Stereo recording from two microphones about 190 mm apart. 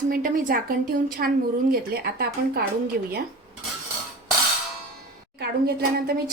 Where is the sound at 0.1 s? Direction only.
45° right (ahead or behind).